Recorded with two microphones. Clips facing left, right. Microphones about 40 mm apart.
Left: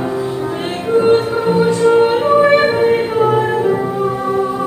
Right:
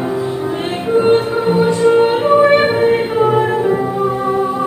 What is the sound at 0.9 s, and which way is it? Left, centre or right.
Music, centre.